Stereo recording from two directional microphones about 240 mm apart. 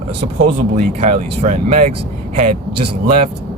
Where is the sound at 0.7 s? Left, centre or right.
Right.